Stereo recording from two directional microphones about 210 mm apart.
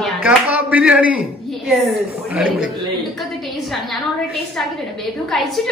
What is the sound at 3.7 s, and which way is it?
A woman's voice, centre (ahead or behind).